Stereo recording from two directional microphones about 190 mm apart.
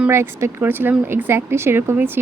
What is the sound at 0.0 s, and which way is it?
Speech, 15° right (ahead or behind).